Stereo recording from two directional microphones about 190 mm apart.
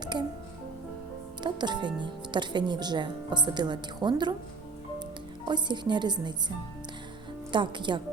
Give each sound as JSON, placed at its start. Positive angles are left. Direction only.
{"t": 0.0, "sound": "music", "side_deg": -25}
{"t": 1.4, "sound": "speech", "side_deg": -25}
{"t": 5.5, "sound": "speech", "side_deg": -25}
{"t": 7.5, "sound": "speech", "side_deg": -25}